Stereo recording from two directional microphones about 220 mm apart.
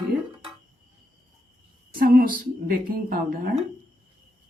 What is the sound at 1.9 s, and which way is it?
A woman's voice, 45° right (ahead or behind).